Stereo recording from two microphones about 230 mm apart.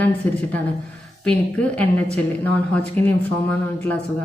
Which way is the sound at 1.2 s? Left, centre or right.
Centre.